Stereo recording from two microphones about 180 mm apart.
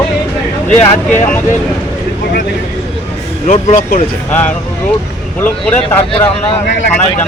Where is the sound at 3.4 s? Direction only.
40° left (ahead or behind).